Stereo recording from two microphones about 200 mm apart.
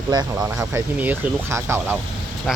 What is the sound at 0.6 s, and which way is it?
Speech, 10° right (ahead or behind).